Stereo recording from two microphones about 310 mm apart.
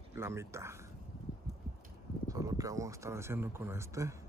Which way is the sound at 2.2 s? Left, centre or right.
Centre.